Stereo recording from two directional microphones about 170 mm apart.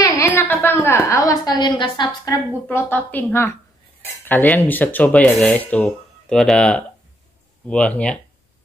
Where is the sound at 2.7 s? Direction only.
10° left (ahead or behind).